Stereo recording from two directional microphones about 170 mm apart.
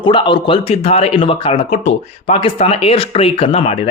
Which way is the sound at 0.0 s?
25° left (ahead or behind).